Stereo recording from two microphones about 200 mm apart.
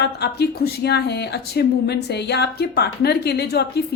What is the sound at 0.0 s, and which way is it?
Speech, 55° left (ahead or behind).